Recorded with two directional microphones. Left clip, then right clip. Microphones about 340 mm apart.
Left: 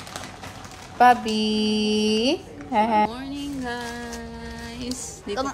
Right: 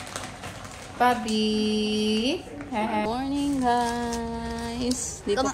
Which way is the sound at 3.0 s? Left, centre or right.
Centre.